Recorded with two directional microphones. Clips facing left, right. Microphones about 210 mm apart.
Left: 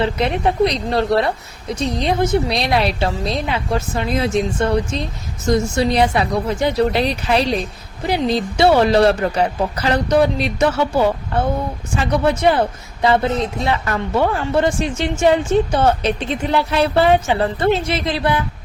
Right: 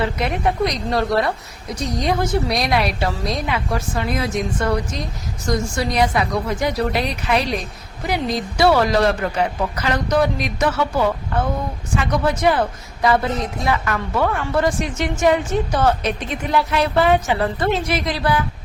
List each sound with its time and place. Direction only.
0.0 s speech: 30° left (ahead or behind)